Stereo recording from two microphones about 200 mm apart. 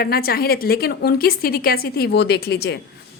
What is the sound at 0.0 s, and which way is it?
A woman's voice, 50° left (ahead or behind).